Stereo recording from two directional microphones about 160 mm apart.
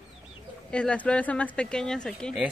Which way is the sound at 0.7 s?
5° left (ahead or behind).